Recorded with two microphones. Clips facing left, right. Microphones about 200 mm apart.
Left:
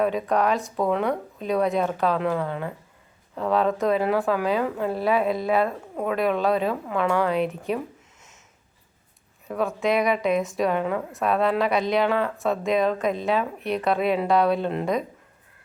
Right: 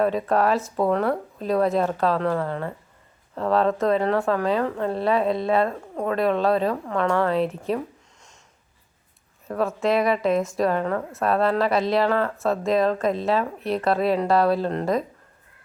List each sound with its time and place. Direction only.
0.0 s a woman's voice: centre (ahead or behind)
9.5 s a woman's voice: centre (ahead or behind)